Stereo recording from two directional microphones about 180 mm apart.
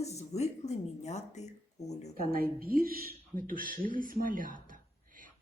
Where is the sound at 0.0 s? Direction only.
35° left (ahead or behind).